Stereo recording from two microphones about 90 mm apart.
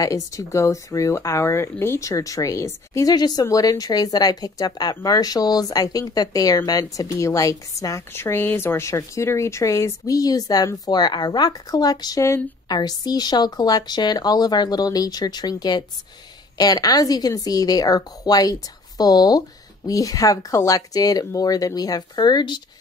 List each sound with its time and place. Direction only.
0.0 s speech: 40° left (ahead or behind)
16.5 s speech: 45° left (ahead or behind)